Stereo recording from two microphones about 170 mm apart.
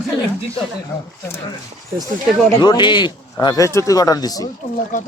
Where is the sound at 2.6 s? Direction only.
25° left (ahead or behind).